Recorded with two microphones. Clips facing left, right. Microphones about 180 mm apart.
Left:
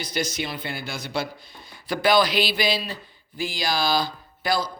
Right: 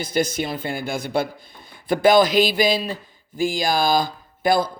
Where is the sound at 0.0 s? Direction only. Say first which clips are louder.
Right 6 dB; 50° right (ahead or behind).